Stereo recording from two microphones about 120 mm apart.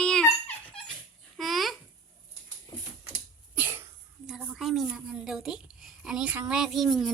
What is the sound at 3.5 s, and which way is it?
Cough, 20° right (ahead or behind).